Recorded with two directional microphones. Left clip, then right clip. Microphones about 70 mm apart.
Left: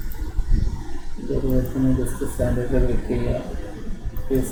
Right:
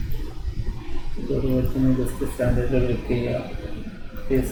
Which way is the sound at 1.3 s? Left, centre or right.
Centre.